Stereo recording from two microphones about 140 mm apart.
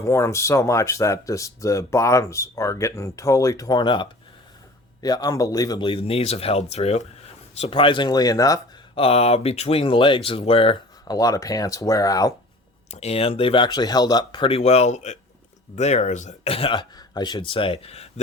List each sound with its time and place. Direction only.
0.0 s speech: 20° left (ahead or behind)
5.9 s speech: 40° left (ahead or behind)
7.6 s speech: 40° left (ahead or behind); by 8.6 s 25° left (ahead or behind)
9.0 s speech: 45° left (ahead or behind)
11.1 s speech: 25° left (ahead or behind)
12.9 s speech: 50° left (ahead or behind)